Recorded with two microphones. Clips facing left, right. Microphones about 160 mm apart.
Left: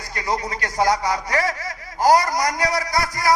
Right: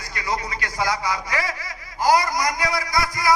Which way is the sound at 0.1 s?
40° left (ahead or behind).